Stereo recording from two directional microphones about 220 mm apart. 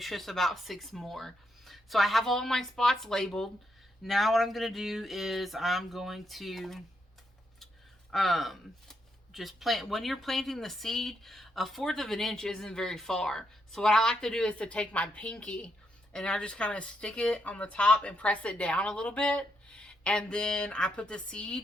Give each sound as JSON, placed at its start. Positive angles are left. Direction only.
{"t": 0.0, "sound": "speech", "side_deg": 0}
{"t": 8.1, "sound": "speech", "side_deg": 0}